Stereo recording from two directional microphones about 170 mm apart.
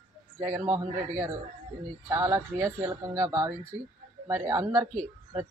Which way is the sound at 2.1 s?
20° right (ahead or behind).